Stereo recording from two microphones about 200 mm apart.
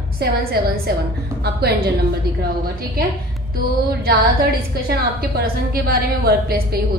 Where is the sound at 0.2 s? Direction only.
50° right (ahead or behind).